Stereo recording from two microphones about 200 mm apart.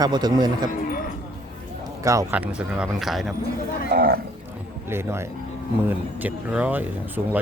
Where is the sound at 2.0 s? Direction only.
10° right (ahead or behind).